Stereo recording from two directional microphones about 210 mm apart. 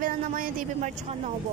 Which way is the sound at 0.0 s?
40° right (ahead or behind).